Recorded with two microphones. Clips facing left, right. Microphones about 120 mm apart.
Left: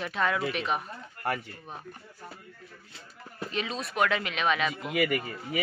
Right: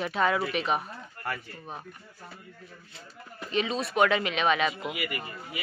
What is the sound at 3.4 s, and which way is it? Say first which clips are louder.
A man's voice: right 5 dB; centre (ahead or behind).